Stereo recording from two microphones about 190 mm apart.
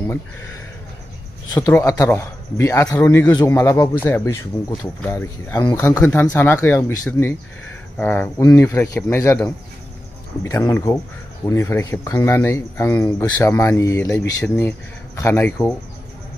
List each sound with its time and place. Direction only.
1.7 s speech: 15° left (ahead or behind)